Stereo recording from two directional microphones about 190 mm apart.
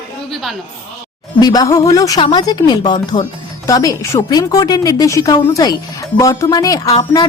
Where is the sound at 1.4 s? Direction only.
20° left (ahead or behind).